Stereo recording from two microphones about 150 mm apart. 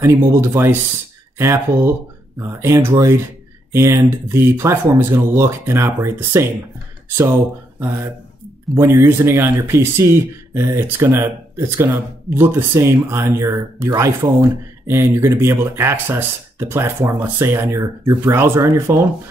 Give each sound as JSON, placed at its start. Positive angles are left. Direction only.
{"t": 0.0, "sound": "speech", "side_deg": -20}
{"t": 7.8, "sound": "speech", "side_deg": -20}